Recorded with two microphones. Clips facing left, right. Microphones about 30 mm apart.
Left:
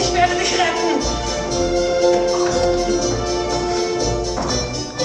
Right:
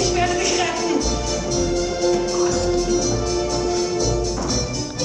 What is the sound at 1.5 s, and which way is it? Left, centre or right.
Music, left.